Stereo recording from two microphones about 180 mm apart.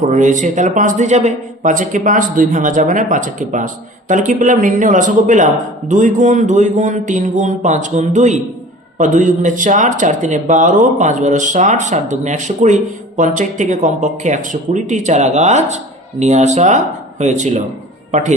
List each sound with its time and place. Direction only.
0.0 s speech: 45° right (ahead or behind)